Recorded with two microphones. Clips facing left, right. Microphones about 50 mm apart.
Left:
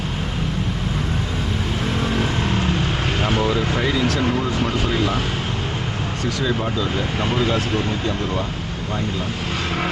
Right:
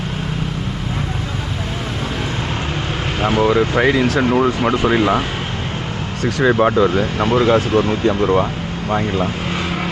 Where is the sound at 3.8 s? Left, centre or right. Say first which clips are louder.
Right 5 dB; right.